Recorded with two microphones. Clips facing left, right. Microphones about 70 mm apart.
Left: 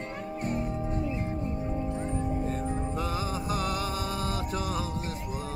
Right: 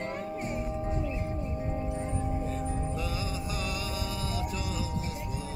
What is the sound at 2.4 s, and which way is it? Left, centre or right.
Music, left.